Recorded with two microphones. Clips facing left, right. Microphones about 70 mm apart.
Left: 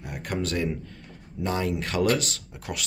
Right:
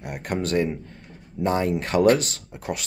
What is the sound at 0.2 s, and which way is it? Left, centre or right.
Speech, right.